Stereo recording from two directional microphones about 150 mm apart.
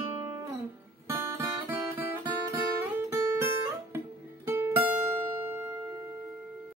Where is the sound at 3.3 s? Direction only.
15° right (ahead or behind).